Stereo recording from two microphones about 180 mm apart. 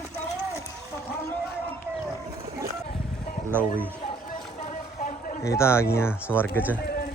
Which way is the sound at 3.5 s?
10° left (ahead or behind).